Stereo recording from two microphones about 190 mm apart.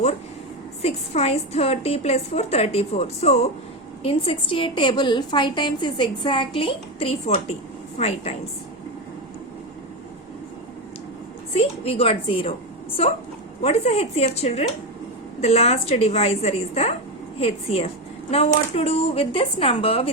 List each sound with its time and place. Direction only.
0.8 s a woman's voice: 35° left (ahead or behind)
11.5 s a woman's voice: 30° left (ahead or behind)